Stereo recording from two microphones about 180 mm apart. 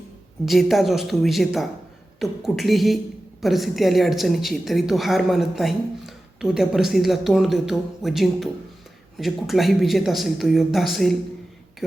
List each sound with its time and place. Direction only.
0.4 s a woman's voice: centre (ahead or behind)